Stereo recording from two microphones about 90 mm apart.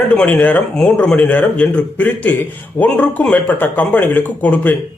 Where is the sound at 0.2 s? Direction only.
20° left (ahead or behind).